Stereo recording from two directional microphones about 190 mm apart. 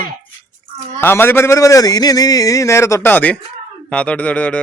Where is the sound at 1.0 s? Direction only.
10° left (ahead or behind).